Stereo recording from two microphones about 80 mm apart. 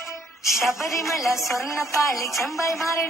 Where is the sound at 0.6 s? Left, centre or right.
Centre.